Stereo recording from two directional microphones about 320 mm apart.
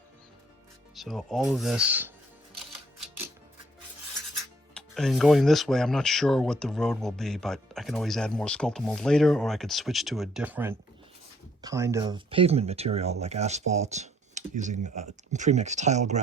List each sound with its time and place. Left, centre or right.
0.9 s speech: centre
4.7 s speech: centre; by 16.2 s right